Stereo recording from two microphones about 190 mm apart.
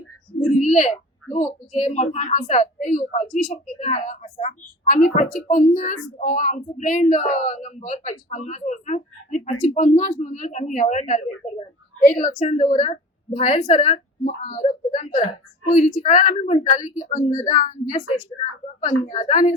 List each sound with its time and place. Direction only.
0.5 s a woman's voice: 40° left (ahead or behind)